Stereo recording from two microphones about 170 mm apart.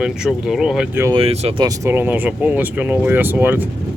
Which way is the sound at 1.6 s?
20° right (ahead or behind).